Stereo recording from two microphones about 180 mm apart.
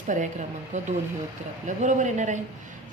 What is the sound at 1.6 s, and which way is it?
Speech, 45° right (ahead or behind).